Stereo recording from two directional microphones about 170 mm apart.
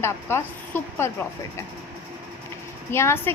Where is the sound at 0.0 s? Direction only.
15° left (ahead or behind).